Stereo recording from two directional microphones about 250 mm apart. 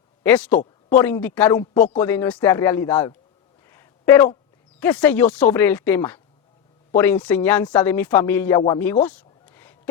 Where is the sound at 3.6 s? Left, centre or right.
Centre.